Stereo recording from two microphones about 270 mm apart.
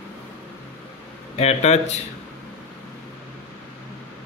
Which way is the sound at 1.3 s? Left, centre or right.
Left.